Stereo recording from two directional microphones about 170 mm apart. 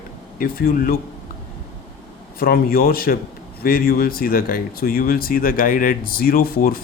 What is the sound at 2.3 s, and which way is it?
Speech, 60° left (ahead or behind).